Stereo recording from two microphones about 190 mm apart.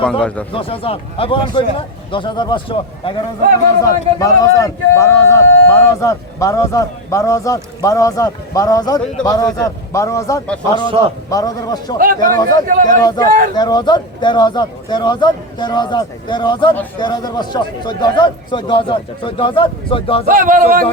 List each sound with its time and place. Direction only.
0.0 s speech: 5° left (ahead or behind)
0.5 s a man's voice: 30° left (ahead or behind)
12.6 s speech: 45° right (ahead or behind)
13.0 s a man's voice: 20° left (ahead or behind)
20.2 s speech: 45° right (ahead or behind)